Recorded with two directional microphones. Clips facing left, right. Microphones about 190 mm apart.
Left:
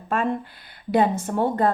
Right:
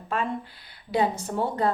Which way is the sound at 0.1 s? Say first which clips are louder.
Left 5 dB; 50° left (ahead or behind).